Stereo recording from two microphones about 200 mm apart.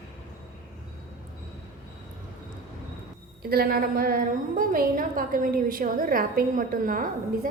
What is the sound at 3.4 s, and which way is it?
A woman's voice, 50° right (ahead or behind).